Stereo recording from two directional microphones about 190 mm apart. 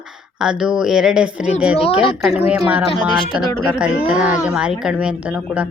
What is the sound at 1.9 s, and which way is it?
Speech, 30° left (ahead or behind).